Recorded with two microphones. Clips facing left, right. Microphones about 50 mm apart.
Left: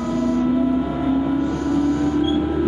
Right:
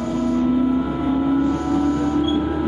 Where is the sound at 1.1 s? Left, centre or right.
Centre.